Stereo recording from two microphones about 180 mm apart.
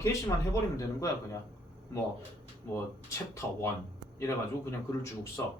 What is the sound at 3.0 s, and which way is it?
Speech, 15° left (ahead or behind).